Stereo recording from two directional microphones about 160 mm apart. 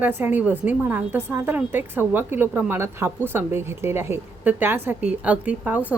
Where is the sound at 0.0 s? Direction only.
10° right (ahead or behind).